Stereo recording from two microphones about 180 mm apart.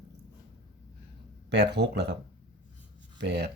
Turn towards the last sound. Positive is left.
turn(degrees=-70)  # may be behind; listen again after turning